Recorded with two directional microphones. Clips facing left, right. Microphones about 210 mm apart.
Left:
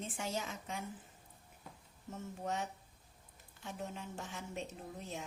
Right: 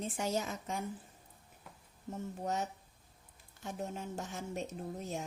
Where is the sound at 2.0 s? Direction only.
40° right (ahead or behind).